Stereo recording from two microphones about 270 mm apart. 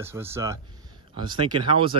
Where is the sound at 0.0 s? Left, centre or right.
Centre.